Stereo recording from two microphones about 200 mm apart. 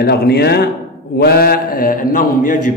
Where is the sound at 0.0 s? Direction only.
50° left (ahead or behind).